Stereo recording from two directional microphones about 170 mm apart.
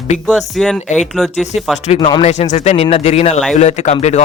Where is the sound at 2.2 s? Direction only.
40° left (ahead or behind).